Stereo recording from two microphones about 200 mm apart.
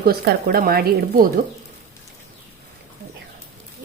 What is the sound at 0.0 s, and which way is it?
Speech, 50° right (ahead or behind).